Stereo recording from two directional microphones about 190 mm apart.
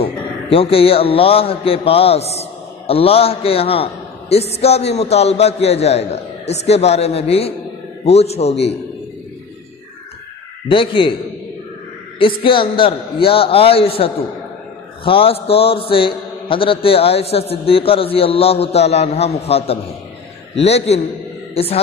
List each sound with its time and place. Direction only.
0.0 s a man's voice: 30° left (ahead or behind)
10.7 s a man's voice: 25° left (ahead or behind)
12.2 s a man's voice: 25° left (ahead or behind)